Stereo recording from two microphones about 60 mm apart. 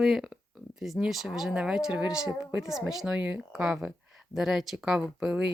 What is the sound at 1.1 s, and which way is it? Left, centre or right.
Speech, centre.